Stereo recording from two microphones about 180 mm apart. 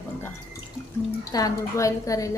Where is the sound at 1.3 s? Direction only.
20° left (ahead or behind).